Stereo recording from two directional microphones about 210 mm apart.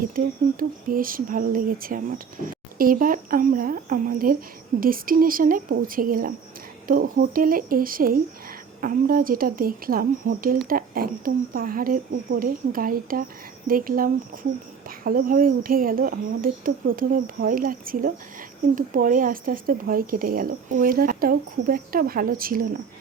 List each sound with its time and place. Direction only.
0.9 s speech: 40° right (ahead or behind)